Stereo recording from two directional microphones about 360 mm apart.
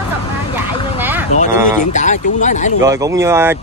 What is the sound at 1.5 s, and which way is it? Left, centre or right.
Speech, centre.